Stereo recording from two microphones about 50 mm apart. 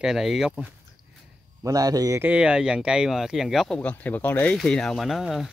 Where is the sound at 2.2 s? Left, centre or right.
Right; by 3.6 s centre.